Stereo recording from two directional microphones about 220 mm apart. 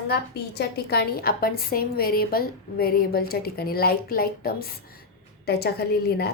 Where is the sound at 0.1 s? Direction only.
45° left (ahead or behind).